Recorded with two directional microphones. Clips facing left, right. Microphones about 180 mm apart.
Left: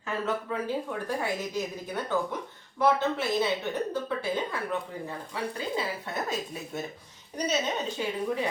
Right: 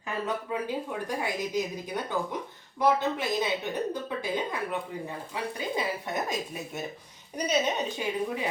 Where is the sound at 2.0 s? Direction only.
15° right (ahead or behind).